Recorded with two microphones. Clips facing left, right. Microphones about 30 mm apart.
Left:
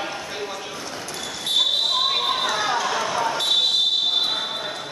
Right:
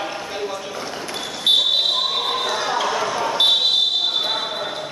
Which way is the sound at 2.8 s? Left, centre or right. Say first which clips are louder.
Right 1 dB; centre.